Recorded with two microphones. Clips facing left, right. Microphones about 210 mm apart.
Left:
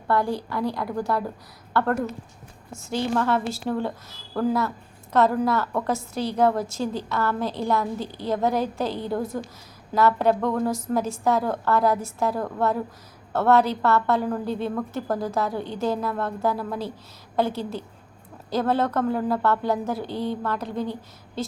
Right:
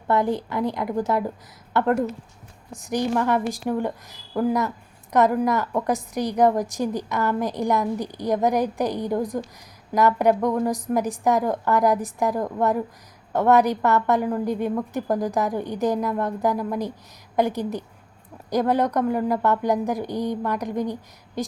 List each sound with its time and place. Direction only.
0.1 s a woman's voice: 20° right (ahead or behind)